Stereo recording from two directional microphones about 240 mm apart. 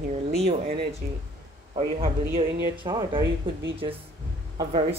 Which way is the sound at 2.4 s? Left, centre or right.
Centre.